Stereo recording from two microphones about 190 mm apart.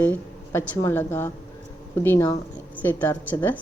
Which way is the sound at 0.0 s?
5° left (ahead or behind).